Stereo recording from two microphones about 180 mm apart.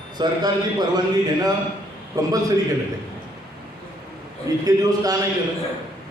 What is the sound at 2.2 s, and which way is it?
Speech, 20° right (ahead or behind).